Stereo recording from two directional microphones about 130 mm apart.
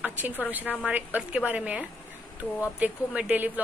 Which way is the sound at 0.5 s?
15° right (ahead or behind).